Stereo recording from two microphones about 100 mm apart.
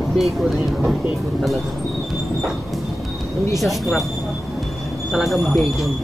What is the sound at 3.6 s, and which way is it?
Speech, centre (ahead or behind).